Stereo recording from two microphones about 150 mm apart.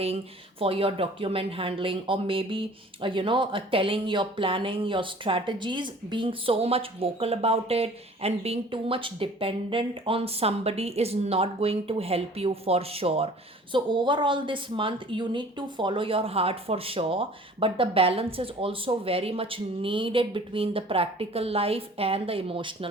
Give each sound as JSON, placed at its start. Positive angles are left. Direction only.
{"t": 0.6, "sound": "speech", "side_deg": -40}